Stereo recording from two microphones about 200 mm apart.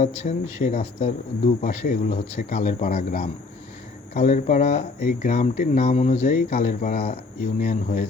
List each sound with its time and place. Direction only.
0.0 s speech: 35° left (ahead or behind)